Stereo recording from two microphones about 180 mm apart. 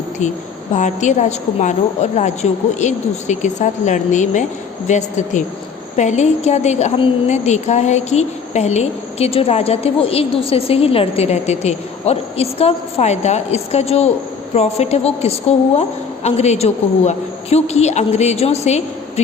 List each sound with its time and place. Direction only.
0.8 s a woman's voice: 40° left (ahead or behind)